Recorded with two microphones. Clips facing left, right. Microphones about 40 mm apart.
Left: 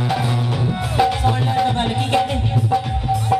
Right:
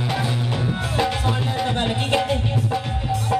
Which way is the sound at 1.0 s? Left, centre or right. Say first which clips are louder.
Left 6 dB; centre.